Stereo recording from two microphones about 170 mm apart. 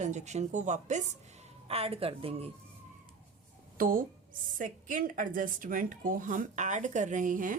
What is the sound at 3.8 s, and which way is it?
A woman's voice, 55° right (ahead or behind).